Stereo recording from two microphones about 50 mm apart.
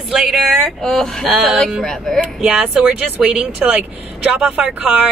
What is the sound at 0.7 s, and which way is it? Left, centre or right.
Speech, centre.